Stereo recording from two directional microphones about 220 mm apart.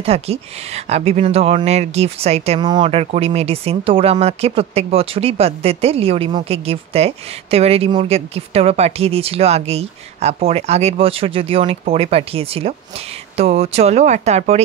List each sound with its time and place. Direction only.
0.0 s speech: 25° right (ahead or behind)